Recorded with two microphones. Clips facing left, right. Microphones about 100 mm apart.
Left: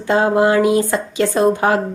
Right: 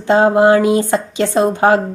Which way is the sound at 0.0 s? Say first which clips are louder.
Right 4 dB; 25° right (ahead or behind).